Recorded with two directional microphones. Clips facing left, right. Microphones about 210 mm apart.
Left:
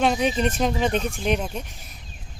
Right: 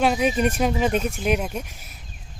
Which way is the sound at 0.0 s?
5° right (ahead or behind).